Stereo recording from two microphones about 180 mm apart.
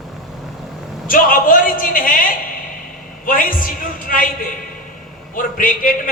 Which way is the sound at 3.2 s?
50° left (ahead or behind).